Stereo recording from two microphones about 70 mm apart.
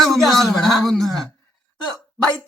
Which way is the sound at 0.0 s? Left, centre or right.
Centre.